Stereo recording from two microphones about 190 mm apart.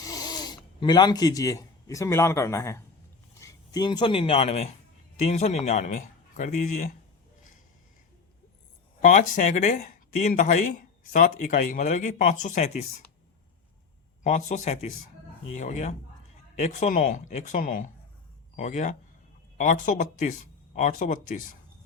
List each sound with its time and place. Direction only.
0.0 s speech: 20° left (ahead or behind); by 5.9 s 35° left (ahead or behind)
9.0 s speech: 40° left (ahead or behind)
14.3 s speech: 35° left (ahead or behind)